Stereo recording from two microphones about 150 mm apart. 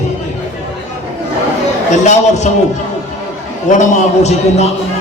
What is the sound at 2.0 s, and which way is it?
Speech, 50° left (ahead or behind).